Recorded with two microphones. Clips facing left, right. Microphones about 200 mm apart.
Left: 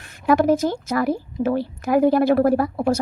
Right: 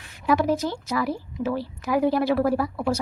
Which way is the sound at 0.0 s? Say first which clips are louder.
Left 5 dB; 50° left (ahead or behind).